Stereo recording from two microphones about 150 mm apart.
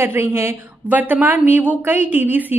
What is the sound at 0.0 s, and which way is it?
A woman's voice, 15° right (ahead or behind).